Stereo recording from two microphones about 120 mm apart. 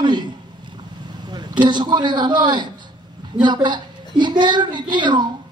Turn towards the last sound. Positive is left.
turn(degrees=-40)  # may be behind; listen again after turning